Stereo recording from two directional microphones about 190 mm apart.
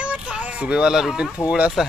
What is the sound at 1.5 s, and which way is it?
Speech, 5° right (ahead or behind).